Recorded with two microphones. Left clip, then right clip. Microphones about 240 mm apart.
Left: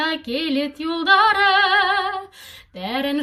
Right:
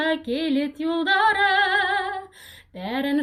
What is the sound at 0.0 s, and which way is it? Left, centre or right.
Singing, centre.